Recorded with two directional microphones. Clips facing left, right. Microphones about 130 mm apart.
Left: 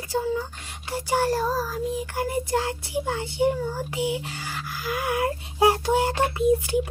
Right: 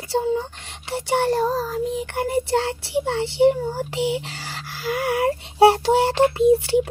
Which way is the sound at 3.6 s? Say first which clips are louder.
Right 3 dB; 30° right (ahead or behind).